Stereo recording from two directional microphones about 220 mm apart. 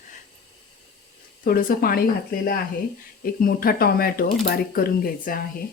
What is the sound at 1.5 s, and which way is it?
Speech, 40° left (ahead or behind).